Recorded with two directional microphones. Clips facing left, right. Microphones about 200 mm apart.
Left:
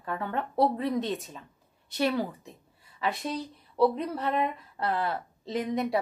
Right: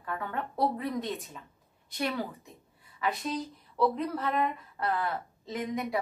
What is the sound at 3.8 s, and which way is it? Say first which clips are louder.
A woman's voice: left 3 dB; 25° left (ahead or behind).